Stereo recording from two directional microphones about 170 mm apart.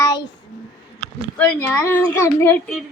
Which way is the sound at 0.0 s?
20° left (ahead or behind).